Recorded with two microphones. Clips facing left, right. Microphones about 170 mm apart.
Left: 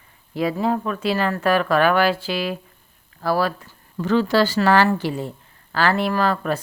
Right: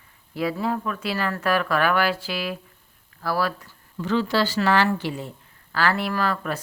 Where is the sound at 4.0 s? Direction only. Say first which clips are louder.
Left 4 dB; 45° left (ahead or behind).